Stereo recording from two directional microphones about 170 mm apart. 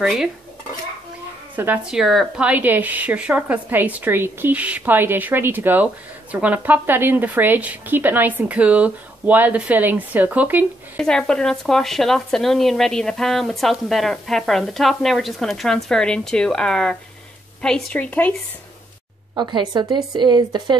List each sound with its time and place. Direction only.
0.0 s speech: centre (ahead or behind)
1.6 s a woman's voice: 10° right (ahead or behind)
11.0 s a woman's voice: 5° left (ahead or behind)
19.3 s speech: 25° right (ahead or behind)